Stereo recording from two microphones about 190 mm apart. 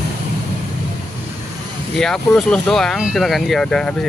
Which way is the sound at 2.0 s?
5° left (ahead or behind).